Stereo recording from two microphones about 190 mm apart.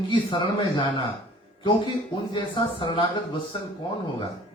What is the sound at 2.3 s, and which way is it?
Speech, 25° left (ahead or behind).